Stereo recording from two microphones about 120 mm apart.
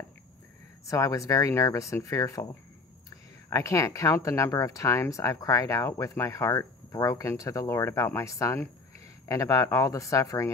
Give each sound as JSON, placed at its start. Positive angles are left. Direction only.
{"t": 0.8, "sound": "speech", "side_deg": 25}